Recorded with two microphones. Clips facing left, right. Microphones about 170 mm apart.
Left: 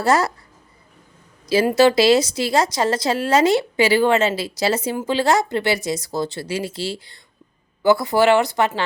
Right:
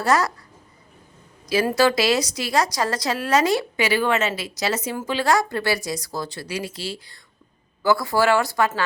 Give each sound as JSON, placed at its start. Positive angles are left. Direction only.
{"t": 0.0, "sound": "a woman's voice", "side_deg": 25}
{"t": 1.5, "sound": "a woman's voice", "side_deg": 25}